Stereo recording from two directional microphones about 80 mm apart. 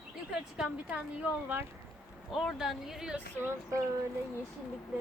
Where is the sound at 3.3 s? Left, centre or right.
Right.